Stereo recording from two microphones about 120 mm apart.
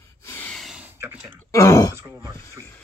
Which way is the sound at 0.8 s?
15° right (ahead or behind).